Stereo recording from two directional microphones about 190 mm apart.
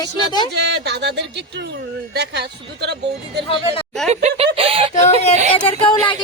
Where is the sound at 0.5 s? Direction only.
60° right (ahead or behind).